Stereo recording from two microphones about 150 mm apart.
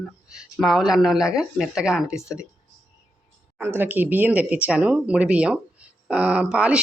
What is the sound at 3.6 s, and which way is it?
Speech, 15° right (ahead or behind).